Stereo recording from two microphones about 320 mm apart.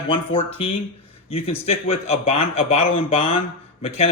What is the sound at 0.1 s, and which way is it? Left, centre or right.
A man's voice, centre.